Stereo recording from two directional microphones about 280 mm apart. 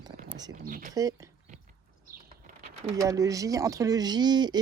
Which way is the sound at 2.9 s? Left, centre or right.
Centre.